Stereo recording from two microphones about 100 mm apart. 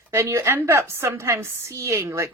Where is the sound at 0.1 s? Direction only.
25° right (ahead or behind).